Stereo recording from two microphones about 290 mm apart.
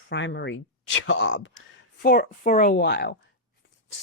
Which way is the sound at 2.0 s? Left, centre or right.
Left.